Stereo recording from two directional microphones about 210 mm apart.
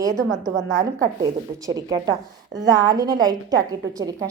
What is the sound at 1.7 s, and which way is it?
A woman's voice, 15° right (ahead or behind).